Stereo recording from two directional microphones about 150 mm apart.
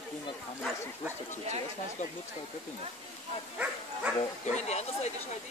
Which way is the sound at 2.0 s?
55° left (ahead or behind).